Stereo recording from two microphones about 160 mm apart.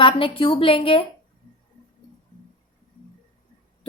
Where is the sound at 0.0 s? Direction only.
35° left (ahead or behind).